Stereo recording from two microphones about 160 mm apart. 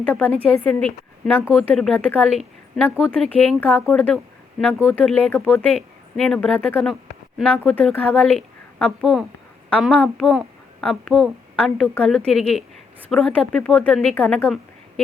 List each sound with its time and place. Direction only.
0.0 s a woman's voice: 10° left (ahead or behind)